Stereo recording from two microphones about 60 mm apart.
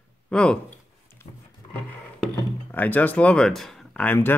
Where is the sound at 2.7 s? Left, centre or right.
Left.